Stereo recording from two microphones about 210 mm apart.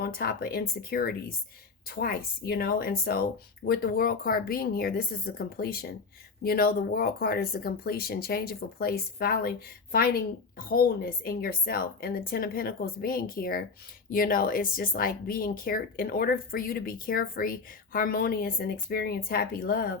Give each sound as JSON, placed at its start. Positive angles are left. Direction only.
{"t": 0.0, "sound": "speech", "side_deg": 45}